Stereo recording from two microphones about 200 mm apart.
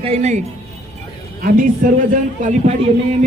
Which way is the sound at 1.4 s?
45° right (ahead or behind).